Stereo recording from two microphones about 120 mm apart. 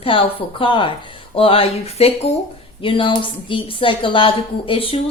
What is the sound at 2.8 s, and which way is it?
A woman's voice, 45° left (ahead or behind).